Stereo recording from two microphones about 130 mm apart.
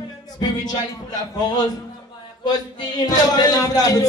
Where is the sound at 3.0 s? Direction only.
30° left (ahead or behind).